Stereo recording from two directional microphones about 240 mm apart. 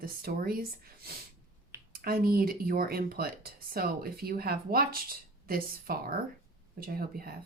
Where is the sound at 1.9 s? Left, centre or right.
Right.